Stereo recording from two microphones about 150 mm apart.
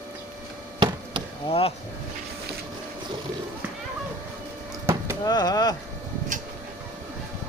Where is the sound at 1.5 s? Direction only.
40° left (ahead or behind).